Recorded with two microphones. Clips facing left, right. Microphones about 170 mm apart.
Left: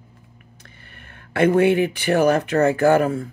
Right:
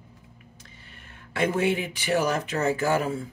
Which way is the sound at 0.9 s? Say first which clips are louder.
Left 7 dB; 60° left (ahead or behind).